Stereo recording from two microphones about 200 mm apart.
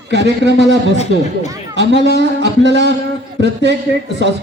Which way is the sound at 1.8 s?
60° right (ahead or behind).